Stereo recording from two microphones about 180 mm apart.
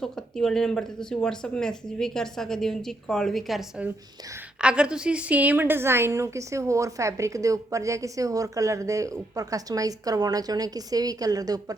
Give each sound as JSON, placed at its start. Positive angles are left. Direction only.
{"t": 0.0, "sound": "a woman's voice", "side_deg": 0}